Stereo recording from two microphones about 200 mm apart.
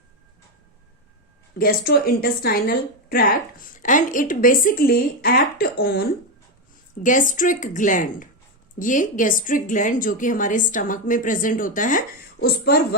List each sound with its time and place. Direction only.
1.5 s a woman's voice: 50° left (ahead or behind)